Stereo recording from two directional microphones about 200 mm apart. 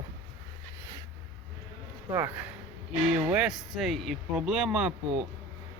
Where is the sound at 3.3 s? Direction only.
5° right (ahead or behind).